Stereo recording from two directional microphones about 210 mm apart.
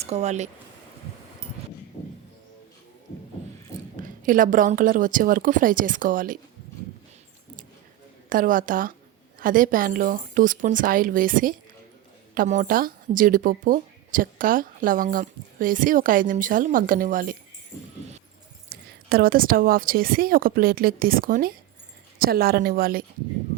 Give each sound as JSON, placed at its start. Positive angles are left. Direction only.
{"t": 0.0, "sound": "speech", "side_deg": -30}
{"t": 4.0, "sound": "speech", "side_deg": -40}
{"t": 8.3, "sound": "speech", "side_deg": -40}
{"t": 18.7, "sound": "speech", "side_deg": -45}